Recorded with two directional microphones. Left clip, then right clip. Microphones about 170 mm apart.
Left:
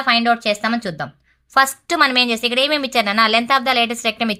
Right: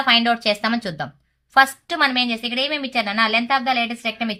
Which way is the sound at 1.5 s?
30° left (ahead or behind).